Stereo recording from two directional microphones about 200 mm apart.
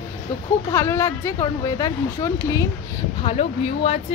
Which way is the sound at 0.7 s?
15° left (ahead or behind).